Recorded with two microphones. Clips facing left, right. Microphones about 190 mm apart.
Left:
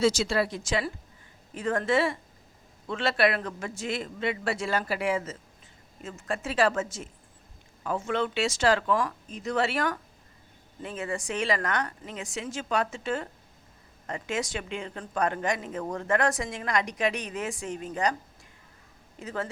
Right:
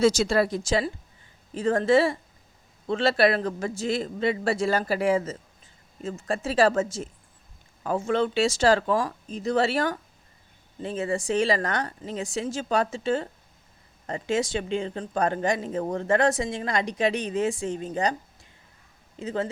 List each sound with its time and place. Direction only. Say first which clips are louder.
0.0 s a man's voice: right 4 dB; 45° right (ahead or behind); by 18.2 s 25° right (ahead or behind)
19.2 s speech: right 5 dB; 25° right (ahead or behind)